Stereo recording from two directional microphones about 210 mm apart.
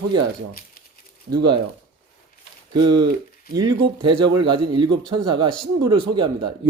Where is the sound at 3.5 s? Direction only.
20° right (ahead or behind).